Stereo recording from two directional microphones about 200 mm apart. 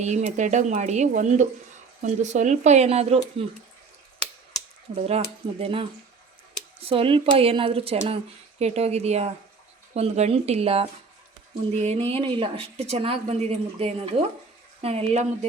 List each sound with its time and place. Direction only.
0.0 s speech: 35° right (ahead or behind)
4.9 s speech: 30° right (ahead or behind)
6.8 s speech: 30° right (ahead or behind)